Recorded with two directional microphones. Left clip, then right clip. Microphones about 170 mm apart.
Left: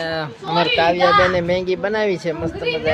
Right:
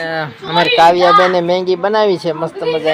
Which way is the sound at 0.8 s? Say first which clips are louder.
Right 7 dB; 15° right (ahead or behind).